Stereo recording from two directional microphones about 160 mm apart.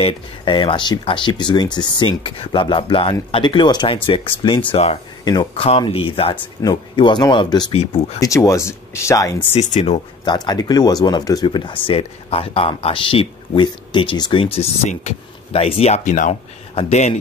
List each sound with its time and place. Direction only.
0.0 s speech: 30° left (ahead or behind)
5.2 s speech: 25° left (ahead or behind)
7.7 s speech: 40° left (ahead or behind)
8.2 s speech: 20° left (ahead or behind)
9.5 s speech: 45° left (ahead or behind)
10.2 s speech: 25° left (ahead or behind); by 17.1 s 45° left (ahead or behind)